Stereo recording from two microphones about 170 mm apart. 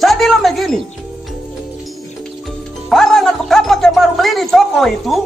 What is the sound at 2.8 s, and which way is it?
Speech, centre (ahead or behind).